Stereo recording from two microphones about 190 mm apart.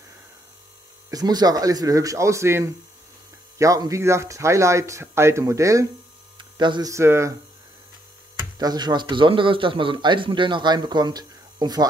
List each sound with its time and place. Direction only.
1.1 s a man's voice: 20° right (ahead or behind)
6.3 s hum: 25° right (ahead or behind)
8.5 s a man's voice: 20° right (ahead or behind)